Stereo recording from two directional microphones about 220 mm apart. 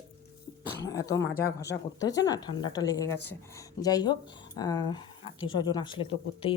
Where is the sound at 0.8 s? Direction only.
15° left (ahead or behind).